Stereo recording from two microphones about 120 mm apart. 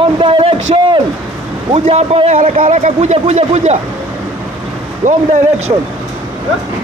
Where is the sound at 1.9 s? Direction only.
65° right (ahead or behind).